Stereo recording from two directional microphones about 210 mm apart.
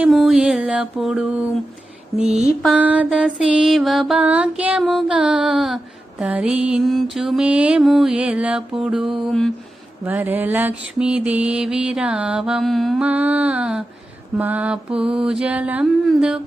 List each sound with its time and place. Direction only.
0.0 s mantra: centre (ahead or behind)